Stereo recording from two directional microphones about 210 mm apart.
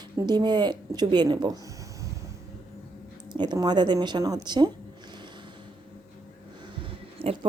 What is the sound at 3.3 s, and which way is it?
Speech, 20° right (ahead or behind).